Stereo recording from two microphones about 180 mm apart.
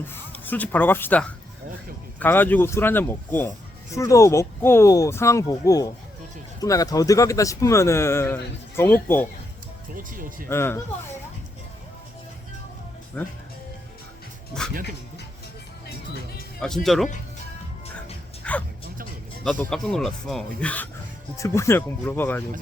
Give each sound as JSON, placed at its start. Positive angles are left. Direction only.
{"t": 0.1, "sound": "speech", "side_deg": 10}
{"t": 9.9, "sound": "speech", "side_deg": -50}
{"t": 10.5, "sound": "speech", "side_deg": 15}
{"t": 13.2, "sound": "speech", "side_deg": 10}
{"t": 16.6, "sound": "speech", "side_deg": 0}
{"t": 18.4, "sound": "a sound", "side_deg": 5}
{"t": 19.7, "sound": "speech", "side_deg": 0}